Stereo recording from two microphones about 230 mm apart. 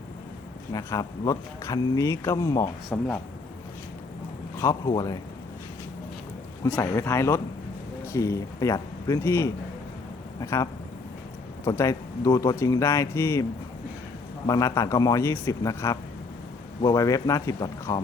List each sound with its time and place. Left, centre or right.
0.7 s speech: centre
4.6 s speech: centre
6.7 s speech: centre
14.4 s speech: centre